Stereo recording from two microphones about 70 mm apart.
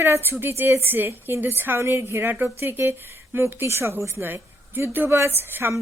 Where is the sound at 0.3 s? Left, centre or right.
Right.